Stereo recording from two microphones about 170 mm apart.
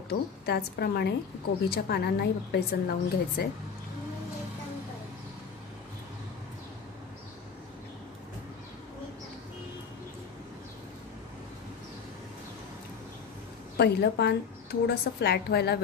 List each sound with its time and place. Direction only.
0.1 s a woman's voice: 70° left (ahead or behind)
13.7 s a woman's voice: 75° left (ahead or behind)